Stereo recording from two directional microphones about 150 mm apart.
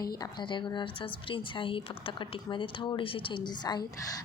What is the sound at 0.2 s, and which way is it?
A woman's voice, 30° left (ahead or behind).